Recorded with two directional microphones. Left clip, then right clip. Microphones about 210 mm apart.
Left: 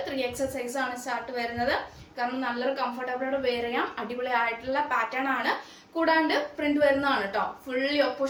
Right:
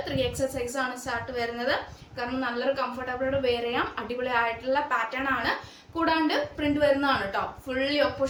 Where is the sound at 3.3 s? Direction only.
15° right (ahead or behind).